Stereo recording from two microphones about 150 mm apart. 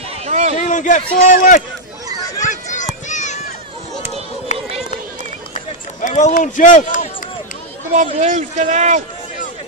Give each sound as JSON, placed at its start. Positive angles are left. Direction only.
{"t": 0.2, "sound": "a sound", "side_deg": -45}
{"t": 0.6, "sound": "a man's voice", "side_deg": 55}
{"t": 2.4, "sound": "children playing", "side_deg": 55}
{"t": 3.1, "sound": "run", "side_deg": 50}
{"t": 4.5, "sound": "run", "side_deg": 55}
{"t": 5.9, "sound": "speech", "side_deg": 55}
{"t": 7.9, "sound": "a man's voice", "side_deg": -55}